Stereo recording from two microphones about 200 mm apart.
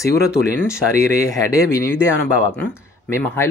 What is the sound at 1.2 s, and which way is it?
Speech, 15° left (ahead or behind).